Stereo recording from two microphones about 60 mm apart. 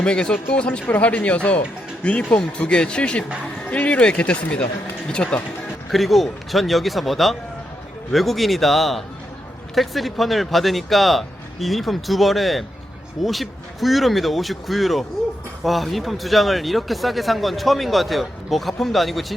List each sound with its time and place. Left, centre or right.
0.0 s speech: centre
5.9 s speech: centre